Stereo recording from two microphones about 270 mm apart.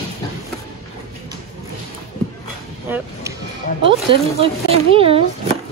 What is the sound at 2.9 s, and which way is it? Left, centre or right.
Vehicle, centre.